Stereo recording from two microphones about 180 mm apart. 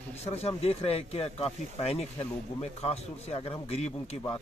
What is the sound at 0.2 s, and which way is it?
Speech, 35° left (ahead or behind).